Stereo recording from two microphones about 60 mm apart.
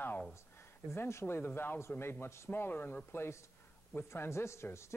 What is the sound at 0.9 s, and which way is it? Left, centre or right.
A man's voice, left.